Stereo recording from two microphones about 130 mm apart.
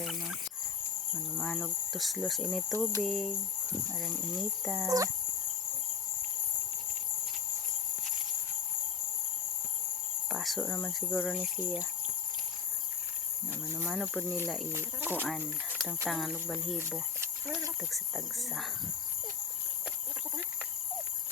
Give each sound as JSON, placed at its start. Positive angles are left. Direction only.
{"t": 0.0, "sound": "a sound", "side_deg": 0}
{"t": 1.4, "sound": "speech", "side_deg": 0}
{"t": 4.9, "sound": "speech", "side_deg": -25}
{"t": 10.3, "sound": "speech", "side_deg": 0}
{"t": 13.8, "sound": "speech", "side_deg": 0}
{"t": 14.7, "sound": "speech", "side_deg": -15}
{"t": 16.0, "sound": "speech", "side_deg": 0}
{"t": 17.9, "sound": "speech", "side_deg": 0}